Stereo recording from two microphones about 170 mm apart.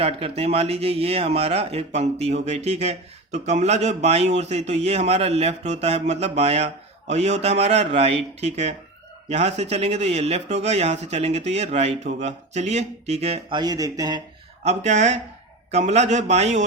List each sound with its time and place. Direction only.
0.0 s a man's voice: 35° right (ahead or behind)
13.6 s speech: 20° right (ahead or behind)
14.6 s a man's voice: 40° right (ahead or behind)